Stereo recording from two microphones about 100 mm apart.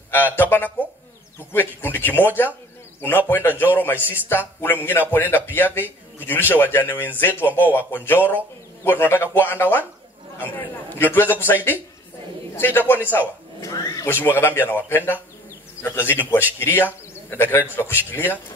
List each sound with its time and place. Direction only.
0.1 s a man's voice: 20° left (ahead or behind)
13.7 s a sound: 35° left (ahead or behind)
14.0 s a man's voice: 20° left (ahead or behind)